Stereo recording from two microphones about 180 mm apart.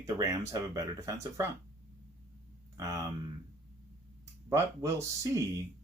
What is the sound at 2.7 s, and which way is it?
Speech, 20° right (ahead or behind).